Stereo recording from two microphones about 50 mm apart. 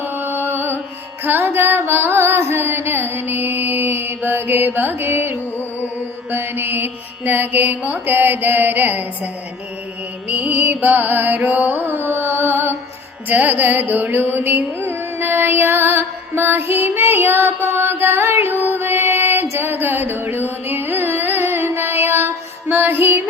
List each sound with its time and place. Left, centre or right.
0.0 s music: right
11.9 s carnatic music: right
13.2 s music: right